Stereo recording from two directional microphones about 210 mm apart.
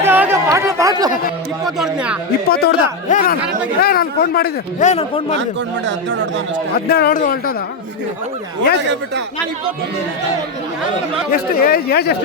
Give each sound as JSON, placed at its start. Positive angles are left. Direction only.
{"t": 0.0, "sound": "chatter", "side_deg": -10}
{"t": 1.6, "sound": "speech", "side_deg": -5}
{"t": 2.5, "sound": "speech", "side_deg": 50}
{"t": 4.9, "sound": "a man's voice", "side_deg": 30}
{"t": 5.3, "sound": "speech", "side_deg": -60}
{"t": 6.7, "sound": "speech", "side_deg": 50}
{"t": 11.3, "sound": "speech", "side_deg": 45}